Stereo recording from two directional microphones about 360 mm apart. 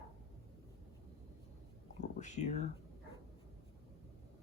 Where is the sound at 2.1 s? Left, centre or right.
Centre.